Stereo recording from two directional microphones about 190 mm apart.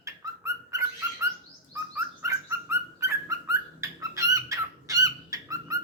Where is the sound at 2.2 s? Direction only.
15° right (ahead or behind).